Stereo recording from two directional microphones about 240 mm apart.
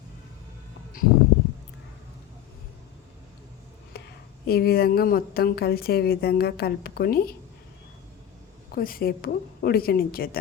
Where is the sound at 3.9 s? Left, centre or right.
Left.